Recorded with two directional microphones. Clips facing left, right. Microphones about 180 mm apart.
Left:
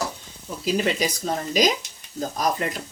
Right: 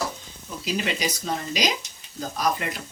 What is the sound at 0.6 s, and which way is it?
Speech, 45° left (ahead or behind).